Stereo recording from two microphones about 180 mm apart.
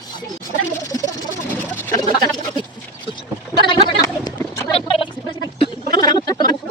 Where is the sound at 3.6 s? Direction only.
25° left (ahead or behind).